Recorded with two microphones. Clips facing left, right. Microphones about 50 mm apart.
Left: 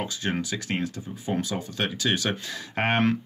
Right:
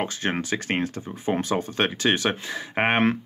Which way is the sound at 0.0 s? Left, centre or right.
Right.